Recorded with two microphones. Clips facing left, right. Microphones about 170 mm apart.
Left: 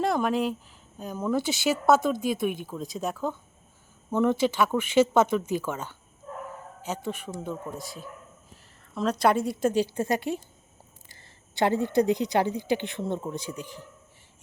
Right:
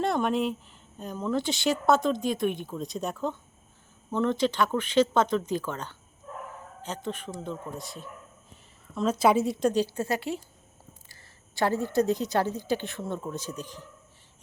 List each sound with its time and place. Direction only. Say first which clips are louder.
0.0 s a woman's voice: left 1 dB; centre (ahead or behind)
7.8 s a woman's voice: left 1 dB; centre (ahead or behind); by 10.4 s 20° left (ahead or behind)
11.1 s a sound: left 1 dB; 20° left (ahead or behind)
11.9 s speech: left 1 dB; 15° left (ahead or behind)